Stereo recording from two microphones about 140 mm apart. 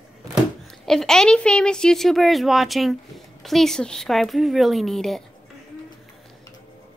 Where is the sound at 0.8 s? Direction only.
Centre (ahead or behind).